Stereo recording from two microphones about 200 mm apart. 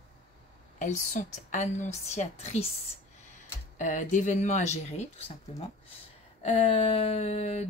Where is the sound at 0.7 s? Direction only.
40° left (ahead or behind).